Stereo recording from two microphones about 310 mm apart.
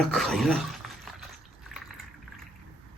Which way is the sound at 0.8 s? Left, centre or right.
Centre.